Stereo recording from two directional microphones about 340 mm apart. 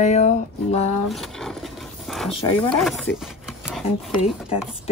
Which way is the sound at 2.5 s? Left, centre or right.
Centre.